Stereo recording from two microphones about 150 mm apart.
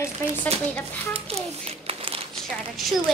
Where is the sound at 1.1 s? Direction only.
40° right (ahead or behind).